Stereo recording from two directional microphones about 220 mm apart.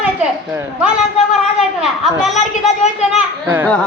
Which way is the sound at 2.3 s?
30° left (ahead or behind).